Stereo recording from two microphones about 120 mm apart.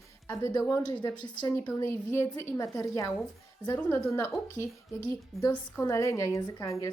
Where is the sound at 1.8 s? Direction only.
20° left (ahead or behind).